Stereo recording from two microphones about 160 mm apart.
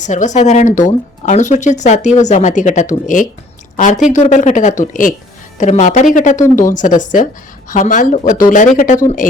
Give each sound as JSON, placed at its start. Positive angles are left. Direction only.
{"t": 0.0, "sound": "speech", "side_deg": 50}